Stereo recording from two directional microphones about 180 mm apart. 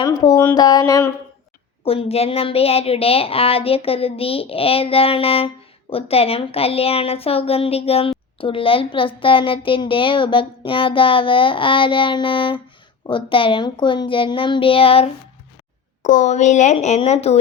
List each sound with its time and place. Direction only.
0.0 s a child's voice: 20° left (ahead or behind)
1.8 s a child's voice: 35° left (ahead or behind)
16.0 s speech: 45° left (ahead or behind)